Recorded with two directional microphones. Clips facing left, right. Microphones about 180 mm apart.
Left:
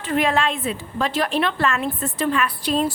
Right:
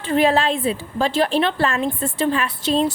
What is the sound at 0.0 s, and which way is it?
A woman's voice, 30° right (ahead or behind).